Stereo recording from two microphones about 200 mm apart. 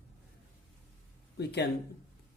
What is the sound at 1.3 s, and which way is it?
Speech, 55° left (ahead or behind).